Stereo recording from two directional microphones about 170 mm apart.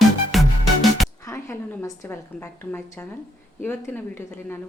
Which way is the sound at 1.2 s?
15° left (ahead or behind).